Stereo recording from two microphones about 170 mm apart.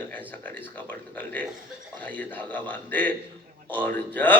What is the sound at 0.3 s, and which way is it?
Speech, 10° left (ahead or behind).